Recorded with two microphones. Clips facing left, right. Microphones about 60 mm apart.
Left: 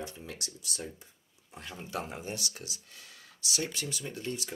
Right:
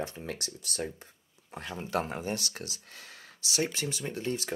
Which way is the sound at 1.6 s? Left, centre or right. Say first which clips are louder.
Right 5 dB; right.